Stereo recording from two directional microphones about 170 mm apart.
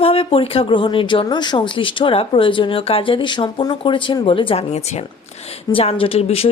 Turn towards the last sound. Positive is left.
turn(degrees=35)  # may be behind; listen again after turning